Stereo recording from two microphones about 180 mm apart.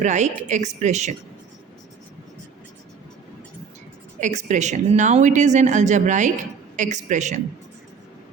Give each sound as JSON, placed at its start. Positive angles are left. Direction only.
{"t": 0.0, "sound": "a woman's voice", "side_deg": -40}
{"t": 4.2, "sound": "a woman's voice", "side_deg": -40}